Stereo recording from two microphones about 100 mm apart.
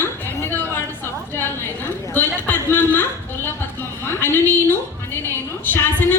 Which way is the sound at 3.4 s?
20° left (ahead or behind).